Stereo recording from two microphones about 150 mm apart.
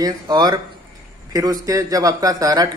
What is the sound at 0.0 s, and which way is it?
A man's voice, 25° right (ahead or behind).